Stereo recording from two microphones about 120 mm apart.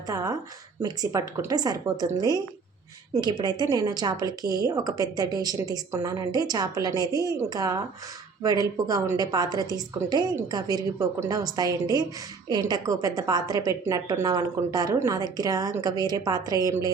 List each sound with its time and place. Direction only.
0.1 s speech: 30° right (ahead or behind)